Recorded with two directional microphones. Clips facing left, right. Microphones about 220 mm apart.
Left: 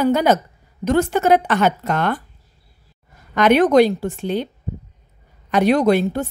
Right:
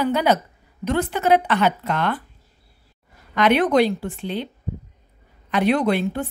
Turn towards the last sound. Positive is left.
turn(degrees=40)  # may be behind; listen again after turning